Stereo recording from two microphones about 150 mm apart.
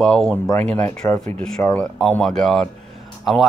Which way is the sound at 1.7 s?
5° left (ahead or behind).